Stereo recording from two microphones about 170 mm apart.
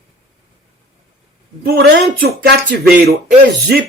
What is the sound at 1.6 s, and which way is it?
Speech, 75° right (ahead or behind).